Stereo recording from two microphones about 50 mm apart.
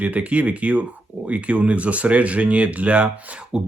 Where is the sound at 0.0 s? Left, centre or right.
Right.